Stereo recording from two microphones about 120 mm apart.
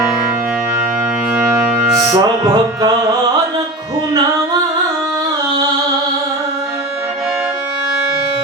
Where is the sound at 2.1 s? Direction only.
35° right (ahead or behind).